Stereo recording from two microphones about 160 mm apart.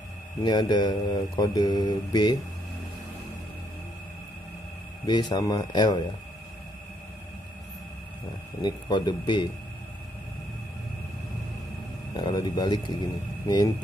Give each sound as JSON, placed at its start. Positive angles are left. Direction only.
{"t": 0.4, "sound": "mantra", "side_deg": 25}
{"t": 5.0, "sound": "mantra", "side_deg": 25}
{"t": 8.5, "sound": "mantra", "side_deg": 25}
{"t": 12.2, "sound": "mantra", "side_deg": 25}